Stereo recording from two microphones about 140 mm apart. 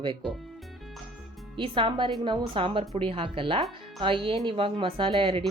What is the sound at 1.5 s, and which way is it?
Speech, 35° right (ahead or behind).